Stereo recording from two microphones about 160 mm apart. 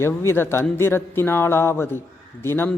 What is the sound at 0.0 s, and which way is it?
Speech, 15° left (ahead or behind).